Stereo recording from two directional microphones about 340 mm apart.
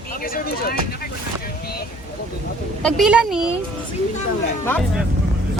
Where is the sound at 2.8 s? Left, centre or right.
Centre.